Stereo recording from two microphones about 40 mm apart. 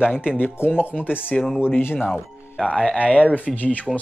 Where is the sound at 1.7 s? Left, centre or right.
Left.